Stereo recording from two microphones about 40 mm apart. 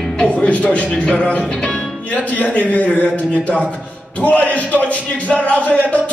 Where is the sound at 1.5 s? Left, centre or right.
Left.